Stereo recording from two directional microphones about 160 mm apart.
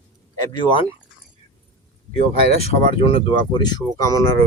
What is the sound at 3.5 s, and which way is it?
Speech, 25° left (ahead or behind).